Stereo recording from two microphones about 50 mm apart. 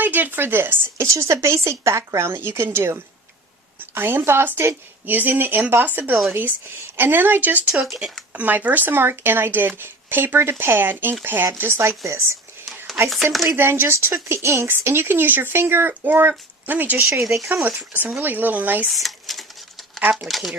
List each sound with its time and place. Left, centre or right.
0.0 s speech: right
0.9 s speech: right
5.0 s speech: right
11.8 s speech: right
13.1 s speech: centre
13.6 s speech: right
14.7 s speech: right
17.1 s speech: centre
17.5 s speech: right
18.9 s a sound: centre
20.0 s speech: right
20.2 s speech: centre